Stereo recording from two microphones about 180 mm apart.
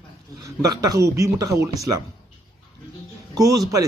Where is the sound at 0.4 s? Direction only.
20° right (ahead or behind).